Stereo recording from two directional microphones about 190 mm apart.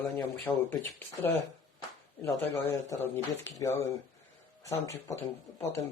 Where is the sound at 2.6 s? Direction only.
15° left (ahead or behind).